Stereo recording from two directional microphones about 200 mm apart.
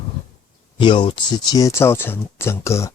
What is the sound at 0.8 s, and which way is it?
Speech, 25° left (ahead or behind).